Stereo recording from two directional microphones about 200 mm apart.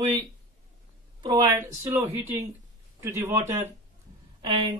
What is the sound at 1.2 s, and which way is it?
Speech, 20° right (ahead or behind).